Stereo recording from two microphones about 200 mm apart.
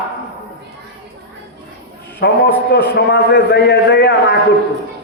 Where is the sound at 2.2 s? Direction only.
55° left (ahead or behind).